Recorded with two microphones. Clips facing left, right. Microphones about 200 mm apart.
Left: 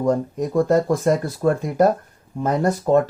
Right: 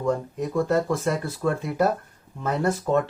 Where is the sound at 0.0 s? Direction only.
40° left (ahead or behind).